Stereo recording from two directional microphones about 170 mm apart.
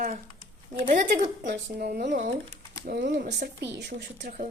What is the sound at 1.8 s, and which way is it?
Speech, 65° right (ahead or behind).